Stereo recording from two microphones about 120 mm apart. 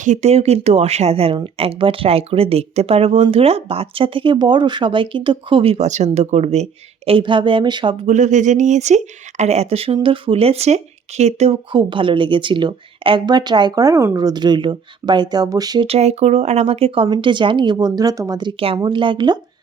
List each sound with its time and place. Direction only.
0.0 s speech: 70° right (ahead or behind); by 7.9 s 40° right (ahead or behind)
8.0 s speech: 90° right
9.4 s speech: 65° right (ahead or behind)
11.7 s speech: 40° right (ahead or behind)
15.9 s speech: 65° right (ahead or behind)
18.8 s speech: 40° right (ahead or behind)